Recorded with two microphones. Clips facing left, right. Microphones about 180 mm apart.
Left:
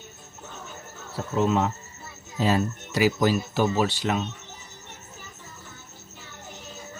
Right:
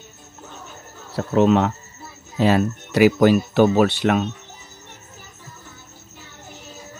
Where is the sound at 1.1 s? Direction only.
75° right (ahead or behind).